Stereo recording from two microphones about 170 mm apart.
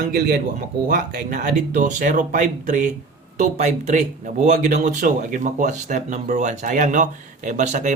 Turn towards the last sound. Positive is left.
turn(degrees=-45)  # may be behind; listen again after turning